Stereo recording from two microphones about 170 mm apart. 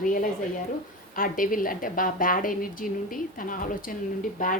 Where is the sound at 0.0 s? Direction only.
50° left (ahead or behind).